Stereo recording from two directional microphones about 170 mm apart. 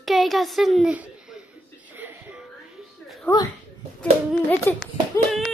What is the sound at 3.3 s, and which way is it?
Speech, 10° left (ahead or behind).